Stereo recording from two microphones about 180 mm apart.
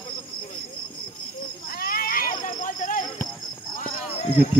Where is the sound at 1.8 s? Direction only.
55° left (ahead or behind).